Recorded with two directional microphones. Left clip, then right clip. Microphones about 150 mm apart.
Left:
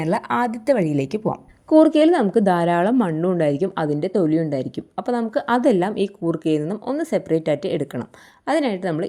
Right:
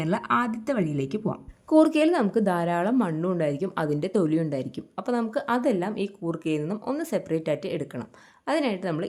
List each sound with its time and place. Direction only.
0.0 s speech: 20° left (ahead or behind)